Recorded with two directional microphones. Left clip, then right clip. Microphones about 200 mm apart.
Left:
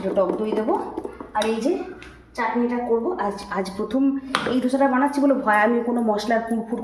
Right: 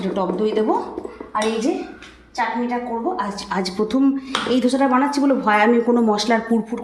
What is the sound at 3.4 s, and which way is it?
Speech, 45° right (ahead or behind).